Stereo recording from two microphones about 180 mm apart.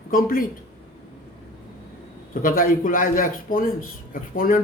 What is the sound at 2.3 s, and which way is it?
A man's voice, 50° left (ahead or behind).